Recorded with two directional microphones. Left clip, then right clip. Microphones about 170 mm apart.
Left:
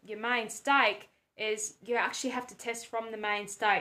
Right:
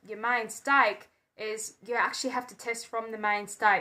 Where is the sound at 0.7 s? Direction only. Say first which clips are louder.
Right 2 dB; 20° left (ahead or behind).